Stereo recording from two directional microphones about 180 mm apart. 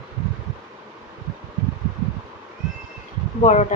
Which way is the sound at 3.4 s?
40° left (ahead or behind).